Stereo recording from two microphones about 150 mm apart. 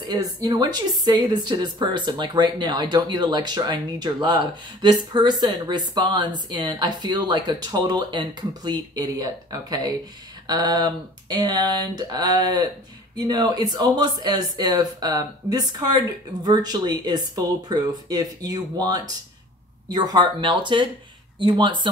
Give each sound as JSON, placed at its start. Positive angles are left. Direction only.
{"t": 0.0, "sound": "speech", "side_deg": -25}